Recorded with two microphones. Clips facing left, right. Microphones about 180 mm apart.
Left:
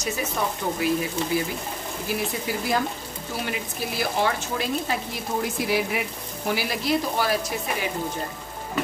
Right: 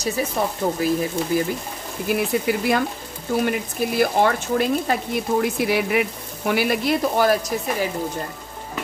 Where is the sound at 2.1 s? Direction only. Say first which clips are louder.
Right 7 dB; 65° right (ahead or behind).